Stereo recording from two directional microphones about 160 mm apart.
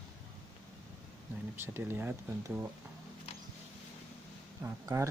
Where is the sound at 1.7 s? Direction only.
15° right (ahead or behind).